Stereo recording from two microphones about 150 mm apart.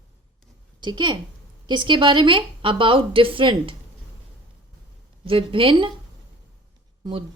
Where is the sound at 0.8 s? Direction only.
30° right (ahead or behind).